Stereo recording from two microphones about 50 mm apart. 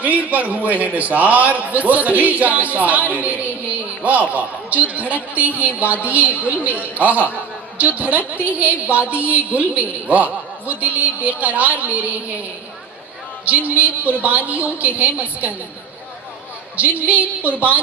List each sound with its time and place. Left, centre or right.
0.0 s a man's voice: right
13.7 s a man's voice: right
17.1 s a man's voice: right